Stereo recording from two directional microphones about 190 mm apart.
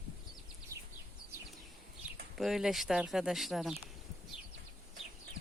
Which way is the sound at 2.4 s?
Centre (ahead or behind).